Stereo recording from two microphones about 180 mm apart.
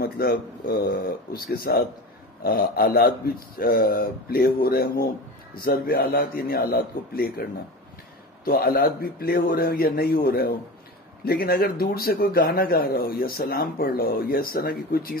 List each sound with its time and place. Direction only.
0.0 s a man's voice: 55° left (ahead or behind)
8.5 s a man's voice: 55° left (ahead or behind)